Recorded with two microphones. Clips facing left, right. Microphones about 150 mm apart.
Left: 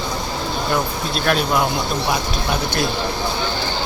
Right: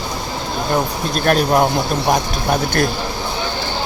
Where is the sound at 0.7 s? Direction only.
45° right (ahead or behind).